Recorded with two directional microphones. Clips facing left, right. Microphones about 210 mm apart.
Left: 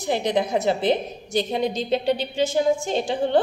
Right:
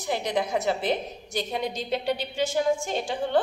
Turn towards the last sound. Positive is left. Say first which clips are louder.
# left 5 dB
turn(degrees=25)  # may be behind; listen again after turning